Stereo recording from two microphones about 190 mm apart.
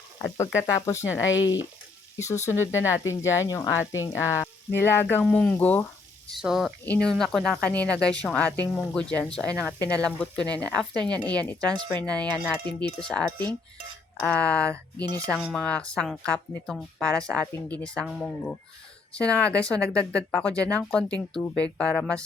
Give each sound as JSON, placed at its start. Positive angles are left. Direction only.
{"t": 0.2, "sound": "speech", "side_deg": 15}
{"t": 2.2, "sound": "speech", "side_deg": 35}
{"t": 2.5, "sound": "speech", "side_deg": 15}
{"t": 6.2, "sound": "a woman's voice", "side_deg": 0}
{"t": 14.9, "sound": "speech", "side_deg": -20}
{"t": 15.3, "sound": "a woman's voice", "side_deg": 0}